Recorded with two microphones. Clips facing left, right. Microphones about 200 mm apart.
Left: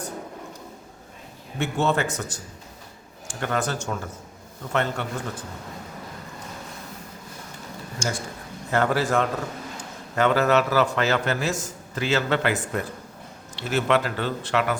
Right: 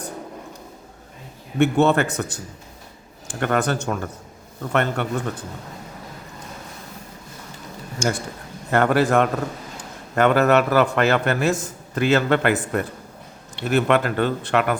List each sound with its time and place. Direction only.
1.5 s a man's voice: 60° right (ahead or behind)
8.0 s a man's voice: 60° right (ahead or behind)